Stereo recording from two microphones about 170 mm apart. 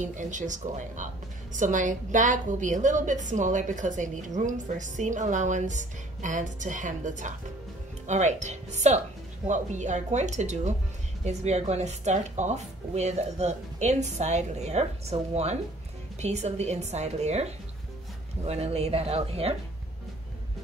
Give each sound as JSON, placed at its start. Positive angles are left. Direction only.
{"t": 0.0, "sound": "a woman's voice", "side_deg": -45}